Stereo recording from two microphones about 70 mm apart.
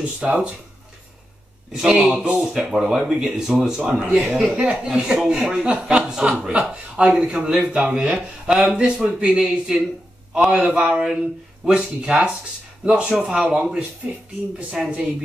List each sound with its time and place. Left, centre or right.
0.2 s speech: centre
1.7 s speech: centre
2.5 s speech: centre